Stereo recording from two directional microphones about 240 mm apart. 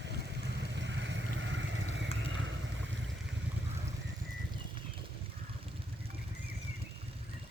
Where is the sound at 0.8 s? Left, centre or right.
Right.